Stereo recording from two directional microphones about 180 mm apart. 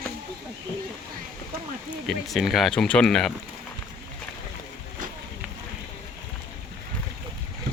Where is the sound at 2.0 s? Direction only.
Centre (ahead or behind).